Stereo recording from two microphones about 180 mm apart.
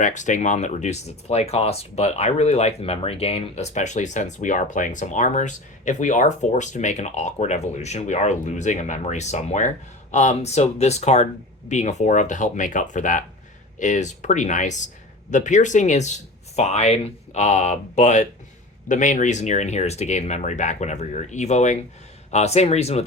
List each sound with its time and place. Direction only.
0.0 s speech: 45° left (ahead or behind)